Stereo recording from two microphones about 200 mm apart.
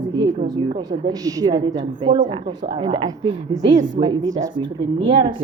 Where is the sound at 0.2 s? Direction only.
20° right (ahead or behind).